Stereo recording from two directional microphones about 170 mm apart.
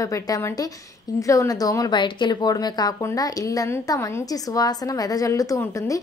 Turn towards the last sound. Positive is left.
turn(degrees=20)  # may be behind; listen again after turning